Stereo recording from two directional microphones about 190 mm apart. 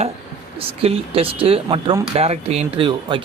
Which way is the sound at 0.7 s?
30° right (ahead or behind).